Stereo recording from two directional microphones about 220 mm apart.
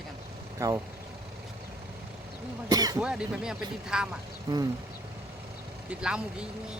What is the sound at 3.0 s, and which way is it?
Speech, 5° right (ahead or behind).